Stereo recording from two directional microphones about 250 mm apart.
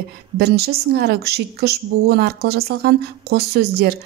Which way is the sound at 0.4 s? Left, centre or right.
Right.